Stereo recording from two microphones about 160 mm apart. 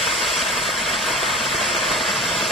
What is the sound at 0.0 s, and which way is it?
Vehicle, centre (ahead or behind).